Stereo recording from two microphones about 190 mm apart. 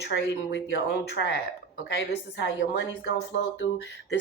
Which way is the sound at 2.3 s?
70° left (ahead or behind).